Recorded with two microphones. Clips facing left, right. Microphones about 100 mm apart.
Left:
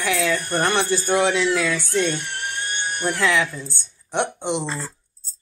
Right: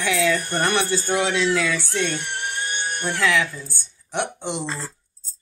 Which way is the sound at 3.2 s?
20° left (ahead or behind).